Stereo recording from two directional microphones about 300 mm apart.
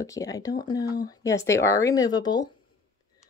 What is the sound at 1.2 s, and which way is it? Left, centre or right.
Speech, centre.